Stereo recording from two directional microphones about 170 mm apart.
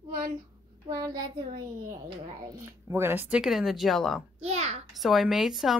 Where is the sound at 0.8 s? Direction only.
20° right (ahead or behind).